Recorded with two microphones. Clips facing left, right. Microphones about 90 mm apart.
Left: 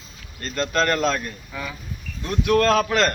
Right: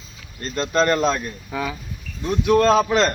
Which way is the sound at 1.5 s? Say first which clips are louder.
Right 6 dB; 70° right (ahead or behind).